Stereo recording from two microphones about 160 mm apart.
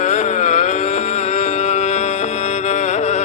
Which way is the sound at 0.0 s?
45° left (ahead or behind).